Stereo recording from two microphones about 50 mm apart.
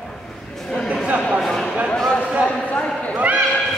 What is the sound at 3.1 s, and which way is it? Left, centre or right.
Basketball bounce, right.